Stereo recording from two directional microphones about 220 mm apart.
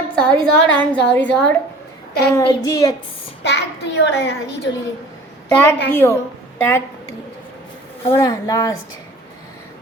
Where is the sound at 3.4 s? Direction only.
50° left (ahead or behind).